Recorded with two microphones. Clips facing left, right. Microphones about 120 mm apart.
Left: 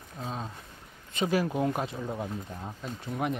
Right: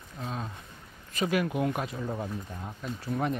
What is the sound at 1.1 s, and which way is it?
Speech, 25° left (ahead or behind).